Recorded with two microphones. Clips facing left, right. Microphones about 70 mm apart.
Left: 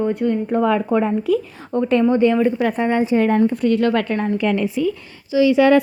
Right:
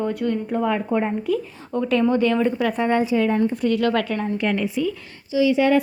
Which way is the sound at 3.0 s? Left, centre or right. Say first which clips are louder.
Left 4 dB; left.